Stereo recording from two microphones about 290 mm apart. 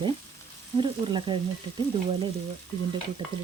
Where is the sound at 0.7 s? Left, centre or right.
Centre.